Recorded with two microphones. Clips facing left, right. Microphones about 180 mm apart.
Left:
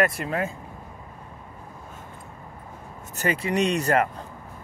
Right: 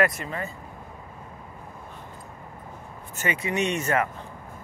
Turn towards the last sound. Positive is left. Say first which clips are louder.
# left 3 dB
turn(degrees=35)  # may be behind; listen again after turning